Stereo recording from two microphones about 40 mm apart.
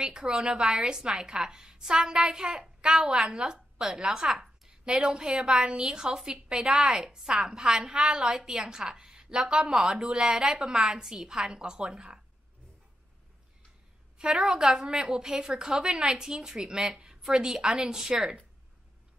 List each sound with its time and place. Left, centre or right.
0.0 s a woman's voice: centre
4.8 s a woman's voice: right
14.1 s a woman's voice: right